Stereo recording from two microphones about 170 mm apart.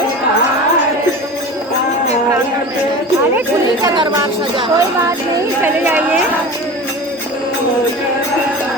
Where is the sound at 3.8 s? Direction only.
25° right (ahead or behind).